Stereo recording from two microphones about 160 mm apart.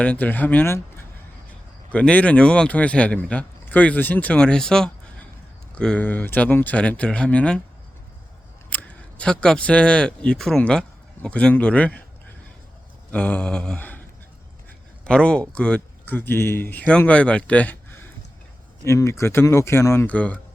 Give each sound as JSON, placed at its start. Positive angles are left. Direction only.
{"t": 0.0, "sound": "speech", "side_deg": 10}
{"t": 8.7, "sound": "speech", "side_deg": 10}
{"t": 13.1, "sound": "a sound", "side_deg": 10}
{"t": 15.0, "sound": "speech", "side_deg": 5}